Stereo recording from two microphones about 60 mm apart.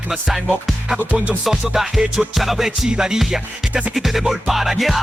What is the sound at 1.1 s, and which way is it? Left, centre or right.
Music, right.